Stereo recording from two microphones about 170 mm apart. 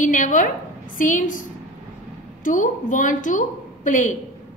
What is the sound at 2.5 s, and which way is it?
A woman's voice, 50° left (ahead or behind).